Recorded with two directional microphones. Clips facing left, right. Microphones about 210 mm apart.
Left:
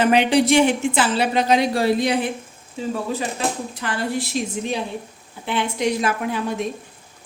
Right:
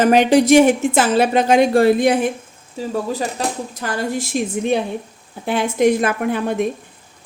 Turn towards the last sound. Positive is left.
turn(degrees=-55)  # may be behind; listen again after turning